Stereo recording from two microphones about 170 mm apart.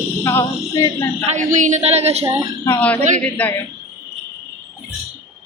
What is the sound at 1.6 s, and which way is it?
Speech, 45° right (ahead or behind).